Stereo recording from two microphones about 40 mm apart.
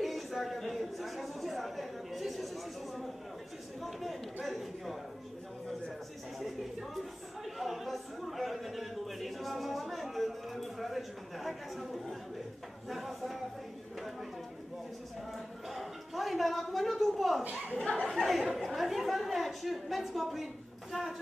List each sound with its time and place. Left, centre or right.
0.0 s a woman's voice: centre
7.4 s a sound: centre
12.8 s speech: centre
15.3 s a man's voice: centre
17.4 s a woman's voice: right
17.7 s speech: left
18.0 s speech: centre